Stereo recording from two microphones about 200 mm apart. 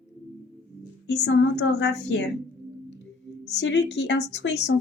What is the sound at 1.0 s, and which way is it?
A woman's voice, 60° left (ahead or behind).